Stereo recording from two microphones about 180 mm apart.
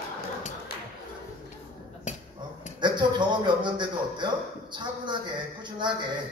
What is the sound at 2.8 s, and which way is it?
A man's voice, 25° right (ahead or behind).